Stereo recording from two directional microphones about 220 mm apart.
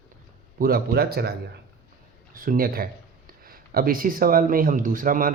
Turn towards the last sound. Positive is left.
turn(degrees=-40)  # may be behind; listen again after turning